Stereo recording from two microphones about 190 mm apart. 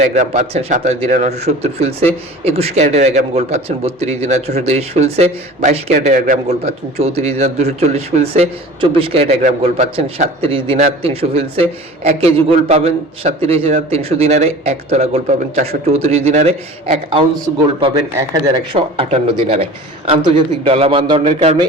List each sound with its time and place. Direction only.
0.1 s a man's voice: 35° right (ahead or behind)
7.0 s a man's voice: 35° right (ahead or behind)